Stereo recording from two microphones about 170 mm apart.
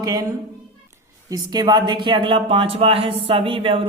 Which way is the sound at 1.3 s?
25° right (ahead or behind).